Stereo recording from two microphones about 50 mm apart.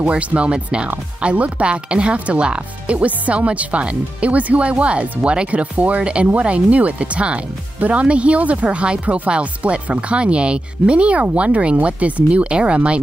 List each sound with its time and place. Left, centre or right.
0.0 s speech: right